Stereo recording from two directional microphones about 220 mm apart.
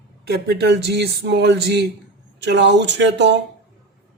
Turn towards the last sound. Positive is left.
turn(degrees=-55)  # may be behind; listen again after turning